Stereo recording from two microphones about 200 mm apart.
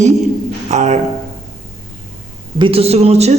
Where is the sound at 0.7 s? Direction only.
35° right (ahead or behind).